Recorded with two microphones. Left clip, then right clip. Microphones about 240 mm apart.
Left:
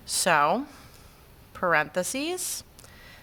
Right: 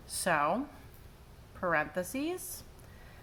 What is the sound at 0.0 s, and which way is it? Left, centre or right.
A woman's voice, left.